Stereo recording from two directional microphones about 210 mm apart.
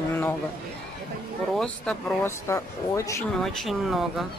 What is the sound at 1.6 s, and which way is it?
Speech, 10° left (ahead or behind).